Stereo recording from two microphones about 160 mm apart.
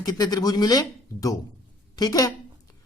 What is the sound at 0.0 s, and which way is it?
Speech, 25° left (ahead or behind).